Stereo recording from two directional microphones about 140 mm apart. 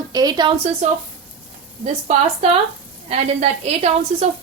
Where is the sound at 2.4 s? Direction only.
45° right (ahead or behind).